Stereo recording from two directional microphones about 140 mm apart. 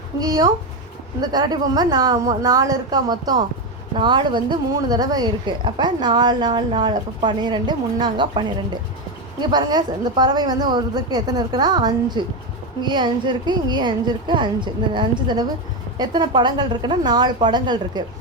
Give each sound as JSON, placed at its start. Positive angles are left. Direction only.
{"t": 0.2, "sound": "a woman's voice", "side_deg": -25}